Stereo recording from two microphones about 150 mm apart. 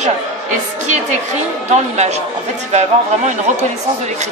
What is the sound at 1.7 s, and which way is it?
A woman's voice, 50° right (ahead or behind).